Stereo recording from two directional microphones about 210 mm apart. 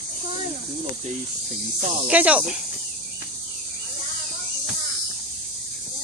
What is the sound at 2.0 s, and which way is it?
Speech, 5° right (ahead or behind).